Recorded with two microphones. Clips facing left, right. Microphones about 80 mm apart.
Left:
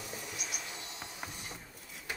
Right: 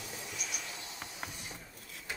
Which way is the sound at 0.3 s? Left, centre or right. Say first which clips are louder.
Even; centre.